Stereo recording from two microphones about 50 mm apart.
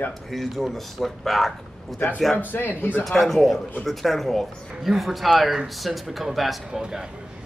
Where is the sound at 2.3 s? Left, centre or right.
Left.